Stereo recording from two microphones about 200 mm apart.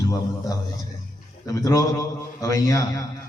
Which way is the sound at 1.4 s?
15° left (ahead or behind).